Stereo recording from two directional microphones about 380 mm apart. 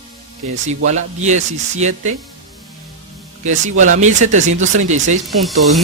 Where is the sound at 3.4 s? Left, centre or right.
Centre.